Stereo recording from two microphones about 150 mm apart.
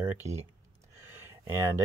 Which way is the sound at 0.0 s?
15° right (ahead or behind).